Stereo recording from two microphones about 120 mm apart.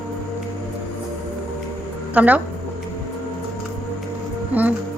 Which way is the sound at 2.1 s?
15° right (ahead or behind).